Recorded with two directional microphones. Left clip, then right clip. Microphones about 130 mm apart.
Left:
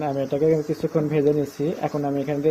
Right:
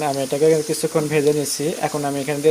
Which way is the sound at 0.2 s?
30° right (ahead or behind).